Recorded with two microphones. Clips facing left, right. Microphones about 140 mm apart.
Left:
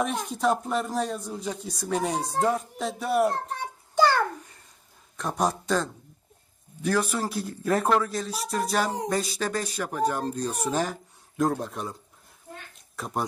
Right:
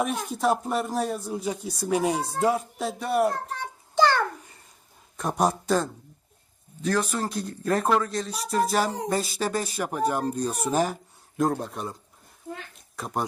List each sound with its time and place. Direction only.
0.0 s speech: 5° right (ahead or behind)
3.6 s child singing: 10° left (ahead or behind)
5.1 s speech: 10° right (ahead or behind)
7.2 s speech: 5° left (ahead or behind)
12.7 s a sound: centre (ahead or behind)